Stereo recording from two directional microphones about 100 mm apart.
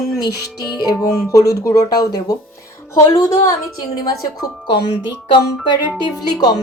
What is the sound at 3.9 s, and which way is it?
Speech, 40° left (ahead or behind).